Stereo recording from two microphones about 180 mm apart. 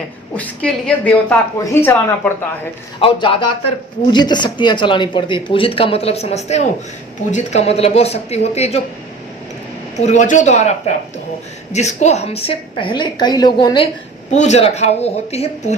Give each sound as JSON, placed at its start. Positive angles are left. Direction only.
{"t": 0.3, "sound": "a woman's voice", "side_deg": 5}
{"t": 3.0, "sound": "speech", "side_deg": 30}
{"t": 10.0, "sound": "speech", "side_deg": 40}
{"t": 14.3, "sound": "speech", "side_deg": 40}